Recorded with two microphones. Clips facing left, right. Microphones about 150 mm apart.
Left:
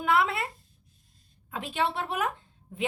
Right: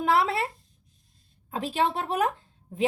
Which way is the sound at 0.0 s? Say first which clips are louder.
Right 2 dB; 35° right (ahead or behind).